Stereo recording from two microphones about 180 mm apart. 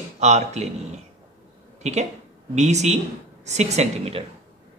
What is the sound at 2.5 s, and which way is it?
Speech, 40° right (ahead or behind).